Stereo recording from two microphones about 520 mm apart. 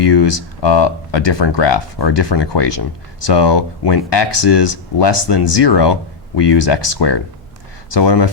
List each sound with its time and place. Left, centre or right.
0.0 s speech: left